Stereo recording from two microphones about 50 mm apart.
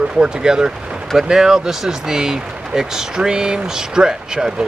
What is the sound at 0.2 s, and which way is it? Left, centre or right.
Speech, centre.